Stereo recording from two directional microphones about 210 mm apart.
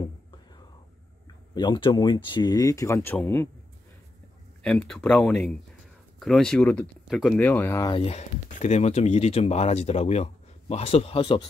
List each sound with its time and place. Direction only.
1.5 s speech: 20° left (ahead or behind)
4.6 s speech: 5° left (ahead or behind)
7.9 s speech: 30° left (ahead or behind)